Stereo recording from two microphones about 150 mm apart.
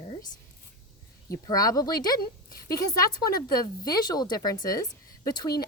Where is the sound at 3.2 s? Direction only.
25° left (ahead or behind).